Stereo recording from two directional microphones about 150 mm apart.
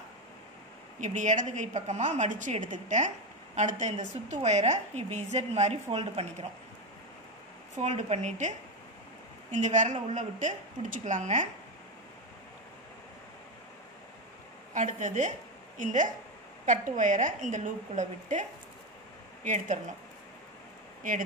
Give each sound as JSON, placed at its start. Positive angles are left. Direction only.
{"t": 1.0, "sound": "a woman's voice", "side_deg": -55}
{"t": 7.8, "sound": "a woman's voice", "side_deg": -45}
{"t": 14.7, "sound": "a woman's voice", "side_deg": -55}